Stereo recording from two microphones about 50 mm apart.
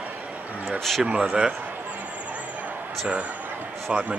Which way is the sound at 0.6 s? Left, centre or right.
Centre.